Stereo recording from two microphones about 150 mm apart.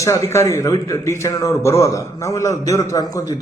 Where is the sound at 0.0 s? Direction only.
20° left (ahead or behind).